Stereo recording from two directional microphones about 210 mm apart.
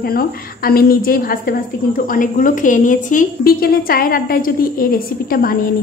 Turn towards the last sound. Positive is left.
turn(degrees=45)  # may be behind; listen again after turning